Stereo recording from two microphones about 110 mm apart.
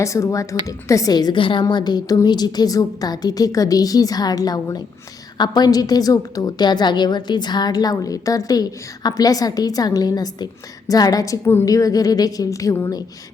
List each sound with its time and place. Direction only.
0.0 s a woman's voice: 30° left (ahead or behind)
1.4 s a woman's voice: 50° left (ahead or behind)
1.6 s a woman's voice: 40° left (ahead or behind)